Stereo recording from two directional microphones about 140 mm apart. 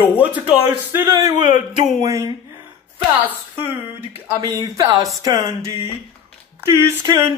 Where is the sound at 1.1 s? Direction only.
25° right (ahead or behind).